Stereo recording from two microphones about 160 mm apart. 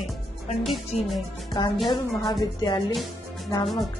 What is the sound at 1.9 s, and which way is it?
Speech, 25° left (ahead or behind).